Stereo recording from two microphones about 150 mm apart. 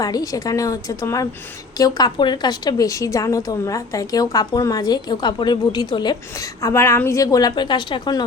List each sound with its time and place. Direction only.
0.0 s a woman's voice: 25° left (ahead or behind)